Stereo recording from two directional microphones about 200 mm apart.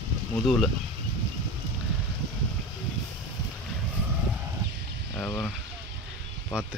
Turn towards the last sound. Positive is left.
turn(degrees=-5)  # may be behind; listen again after turning